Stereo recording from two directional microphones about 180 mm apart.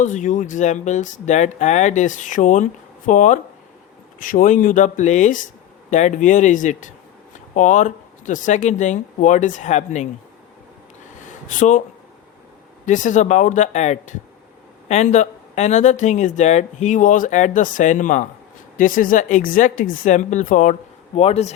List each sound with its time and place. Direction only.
0.0 s speech: 45° left (ahead or behind)
11.3 s speech: 45° left (ahead or behind)
12.8 s speech: 45° left (ahead or behind)
21.2 s a man's voice: 35° left (ahead or behind)